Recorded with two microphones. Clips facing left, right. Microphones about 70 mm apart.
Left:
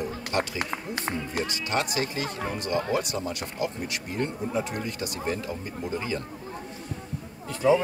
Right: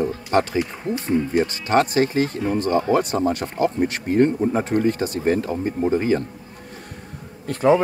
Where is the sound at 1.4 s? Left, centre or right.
Right.